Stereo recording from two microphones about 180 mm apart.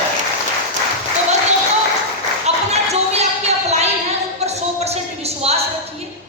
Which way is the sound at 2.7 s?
35° right (ahead or behind).